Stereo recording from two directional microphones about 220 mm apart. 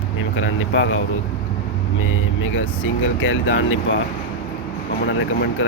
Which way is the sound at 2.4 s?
60° left (ahead or behind).